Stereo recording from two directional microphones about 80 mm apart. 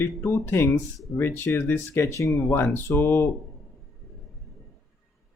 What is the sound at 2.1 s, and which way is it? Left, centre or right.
Speech, left.